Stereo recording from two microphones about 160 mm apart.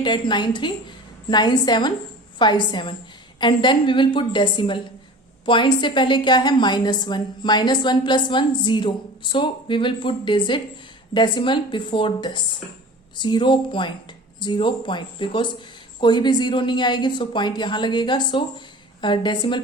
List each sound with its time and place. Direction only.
0.0 s a woman's voice: 30° left (ahead or behind)